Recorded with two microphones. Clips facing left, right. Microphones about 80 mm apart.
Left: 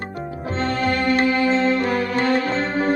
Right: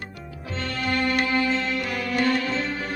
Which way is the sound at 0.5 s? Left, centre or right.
Left.